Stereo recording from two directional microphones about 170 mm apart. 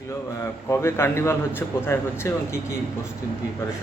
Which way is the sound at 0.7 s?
15° left (ahead or behind).